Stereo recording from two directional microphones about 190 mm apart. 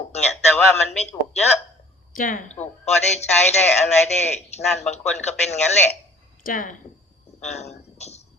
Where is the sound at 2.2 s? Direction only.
45° left (ahead or behind).